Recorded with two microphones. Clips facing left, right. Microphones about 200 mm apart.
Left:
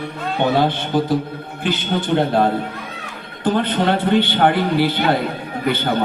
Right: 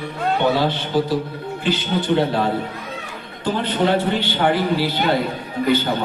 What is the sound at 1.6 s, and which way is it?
A man's voice, 55° left (ahead or behind).